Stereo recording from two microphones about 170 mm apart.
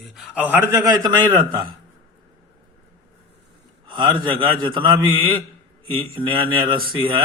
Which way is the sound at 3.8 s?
25° right (ahead or behind).